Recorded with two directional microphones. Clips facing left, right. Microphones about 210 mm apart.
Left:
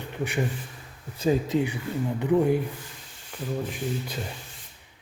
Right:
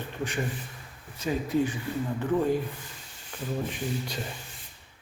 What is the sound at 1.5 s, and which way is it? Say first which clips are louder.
Speech: left 1 dB; 15° left (ahead or behind).